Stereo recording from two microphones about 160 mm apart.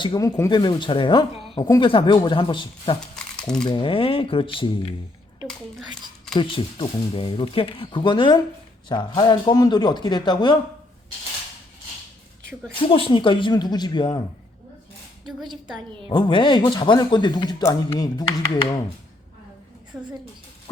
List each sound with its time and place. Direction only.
0.0 s speech: 25° left (ahead or behind)
6.3 s speech: 30° left (ahead or behind)
12.9 s speech: 35° left (ahead or behind)
15.4 s a woman's voice: 35° right (ahead or behind)
16.0 s speech: 30° left (ahead or behind)